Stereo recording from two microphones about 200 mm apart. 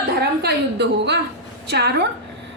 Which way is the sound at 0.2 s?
55° right (ahead or behind).